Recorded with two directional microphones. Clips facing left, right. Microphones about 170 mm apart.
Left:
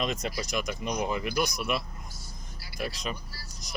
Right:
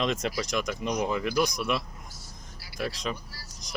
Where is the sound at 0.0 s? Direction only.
Centre (ahead or behind).